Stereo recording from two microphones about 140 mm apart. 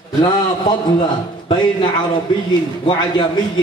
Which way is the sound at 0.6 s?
35° left (ahead or behind).